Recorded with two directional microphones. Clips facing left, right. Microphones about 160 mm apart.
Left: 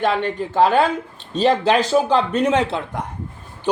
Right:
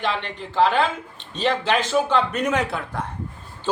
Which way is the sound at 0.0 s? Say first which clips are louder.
Left 7 dB; 45° left (ahead or behind).